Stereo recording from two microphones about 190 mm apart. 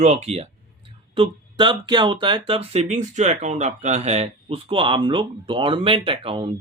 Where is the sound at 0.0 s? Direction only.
35° right (ahead or behind).